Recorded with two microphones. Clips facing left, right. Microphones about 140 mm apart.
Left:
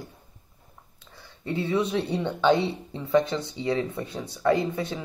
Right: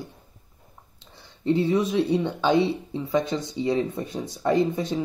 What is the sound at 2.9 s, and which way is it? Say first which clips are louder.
Speech: left 1 dB; 15° right (ahead or behind).